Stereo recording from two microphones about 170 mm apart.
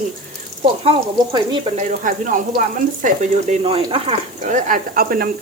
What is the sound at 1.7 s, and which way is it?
Speech, 50° right (ahead or behind).